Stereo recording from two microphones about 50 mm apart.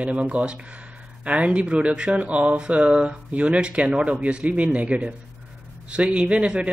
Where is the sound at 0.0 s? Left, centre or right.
Right.